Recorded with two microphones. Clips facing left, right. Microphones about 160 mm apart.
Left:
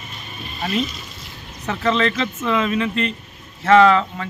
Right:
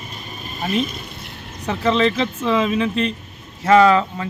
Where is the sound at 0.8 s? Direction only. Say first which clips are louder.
Right 1 dB; 55° right (ahead or behind).